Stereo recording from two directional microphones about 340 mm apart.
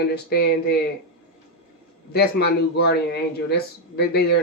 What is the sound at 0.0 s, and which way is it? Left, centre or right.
Speech, left.